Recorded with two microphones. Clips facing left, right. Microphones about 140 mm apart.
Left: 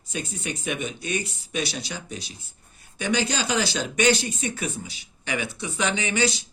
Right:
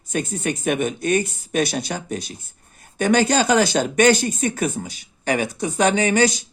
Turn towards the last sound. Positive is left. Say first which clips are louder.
# right 7 dB
turn(degrees=-45)  # may be behind; listen again after turning